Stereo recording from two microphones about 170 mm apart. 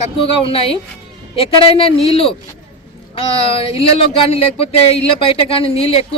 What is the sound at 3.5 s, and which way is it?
Speech, 35° left (ahead or behind).